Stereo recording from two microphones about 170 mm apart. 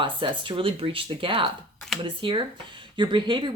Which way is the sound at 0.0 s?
30° right (ahead or behind).